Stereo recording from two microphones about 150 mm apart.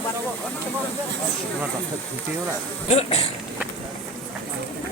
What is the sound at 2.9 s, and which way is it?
Speech, 45° left (ahead or behind).